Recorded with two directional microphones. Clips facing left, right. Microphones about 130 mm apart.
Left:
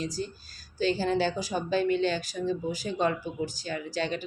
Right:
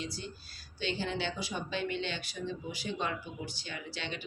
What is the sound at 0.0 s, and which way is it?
A woman's voice, 40° left (ahead or behind).